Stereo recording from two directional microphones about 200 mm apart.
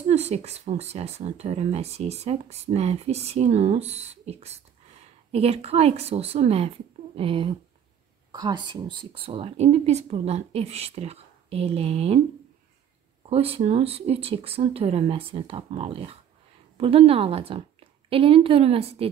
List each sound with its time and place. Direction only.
0.0 s speech: 30° right (ahead or behind)
13.3 s a woman's voice: 30° right (ahead or behind)